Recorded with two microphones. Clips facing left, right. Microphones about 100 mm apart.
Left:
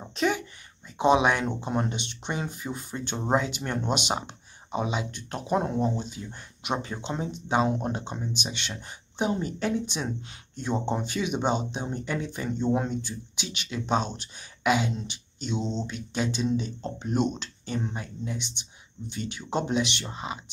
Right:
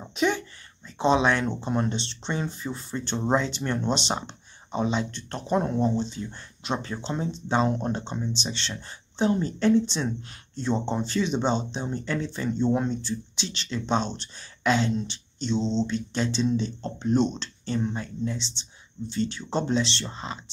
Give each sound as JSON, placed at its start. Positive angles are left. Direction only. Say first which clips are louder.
{"t": 0.1, "sound": "speech", "louder": "right 1 dB", "side_deg": 0}
{"t": 0.9, "sound": "speech", "louder": "even", "side_deg": 15}